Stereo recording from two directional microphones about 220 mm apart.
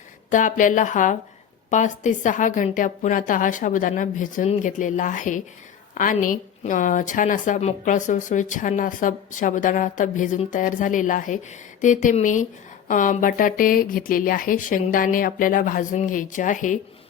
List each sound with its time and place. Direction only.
0.3 s a woman's voice: 35° left (ahead or behind)